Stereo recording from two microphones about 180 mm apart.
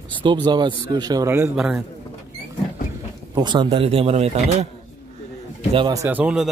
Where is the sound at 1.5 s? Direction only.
5° right (ahead or behind).